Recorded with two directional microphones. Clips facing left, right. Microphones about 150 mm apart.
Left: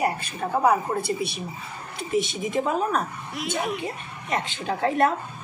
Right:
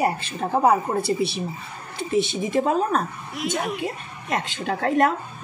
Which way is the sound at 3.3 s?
Centre (ahead or behind).